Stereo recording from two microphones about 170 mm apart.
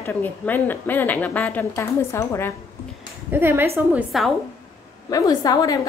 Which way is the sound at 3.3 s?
10° right (ahead or behind).